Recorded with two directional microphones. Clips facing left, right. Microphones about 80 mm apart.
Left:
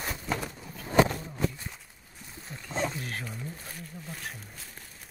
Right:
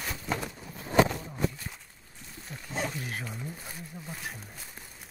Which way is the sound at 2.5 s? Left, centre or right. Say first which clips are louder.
Left 2 dB; centre.